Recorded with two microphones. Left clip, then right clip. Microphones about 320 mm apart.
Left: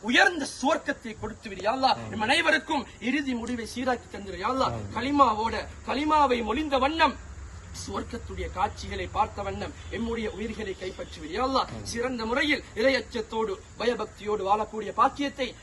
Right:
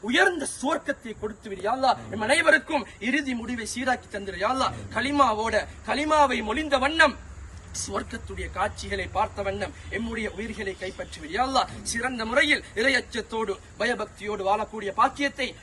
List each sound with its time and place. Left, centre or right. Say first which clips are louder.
0.0 s speech: even; centre